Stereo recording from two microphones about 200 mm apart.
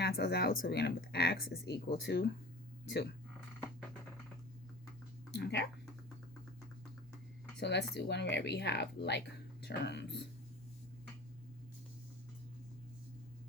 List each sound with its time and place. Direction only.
0.0 s speech: 50° left (ahead or behind)
5.3 s speech: 60° left (ahead or behind)
7.6 s speech: 60° left (ahead or behind)